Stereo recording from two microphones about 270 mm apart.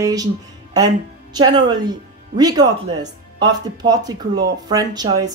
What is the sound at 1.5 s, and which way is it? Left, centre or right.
Speech, centre.